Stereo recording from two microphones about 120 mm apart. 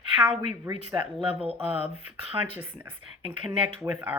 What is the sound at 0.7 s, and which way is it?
Speech, 20° right (ahead or behind).